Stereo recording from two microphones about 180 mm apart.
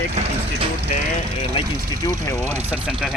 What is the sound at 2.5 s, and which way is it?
Speech, 5° right (ahead or behind).